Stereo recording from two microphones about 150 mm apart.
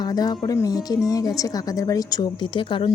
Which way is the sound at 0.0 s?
25° left (ahead or behind).